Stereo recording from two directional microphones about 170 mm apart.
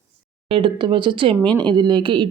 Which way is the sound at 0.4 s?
30° right (ahead or behind).